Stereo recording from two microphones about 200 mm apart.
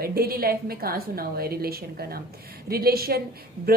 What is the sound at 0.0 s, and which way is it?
A woman's voice, 50° right (ahead or behind).